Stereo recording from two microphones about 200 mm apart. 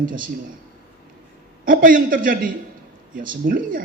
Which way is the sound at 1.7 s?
45° right (ahead or behind).